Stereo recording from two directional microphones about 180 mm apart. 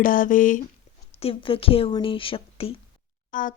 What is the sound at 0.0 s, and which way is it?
Speech, 50° left (ahead or behind).